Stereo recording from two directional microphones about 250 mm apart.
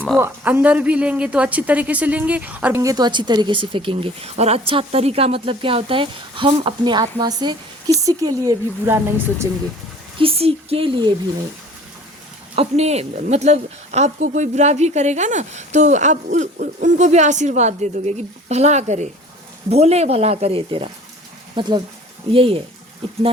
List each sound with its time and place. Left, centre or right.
0.2 s speech: centre
10.2 s speech: right
12.5 s speech: right